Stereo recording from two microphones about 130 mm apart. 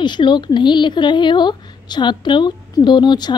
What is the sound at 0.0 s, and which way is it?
A woman's voice, 35° left (ahead or behind).